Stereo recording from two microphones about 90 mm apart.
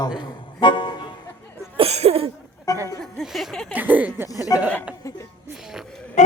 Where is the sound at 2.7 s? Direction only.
40° left (ahead or behind).